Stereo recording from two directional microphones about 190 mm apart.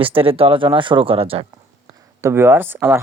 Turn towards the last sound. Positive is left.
turn(degrees=-10)  # may be behind; listen again after turning